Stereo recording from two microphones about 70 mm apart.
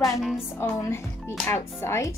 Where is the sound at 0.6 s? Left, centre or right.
Left.